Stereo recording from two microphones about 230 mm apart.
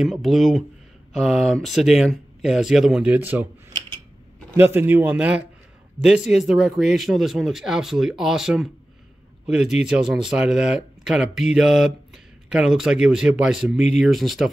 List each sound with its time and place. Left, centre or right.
0.0 s speech: centre
4.6 s a man's voice: centre